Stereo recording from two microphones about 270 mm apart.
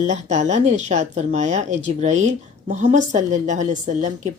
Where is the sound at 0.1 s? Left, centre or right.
Right.